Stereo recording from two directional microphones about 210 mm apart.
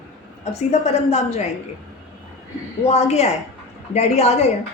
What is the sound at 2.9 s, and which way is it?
A woman's voice, 30° left (ahead or behind).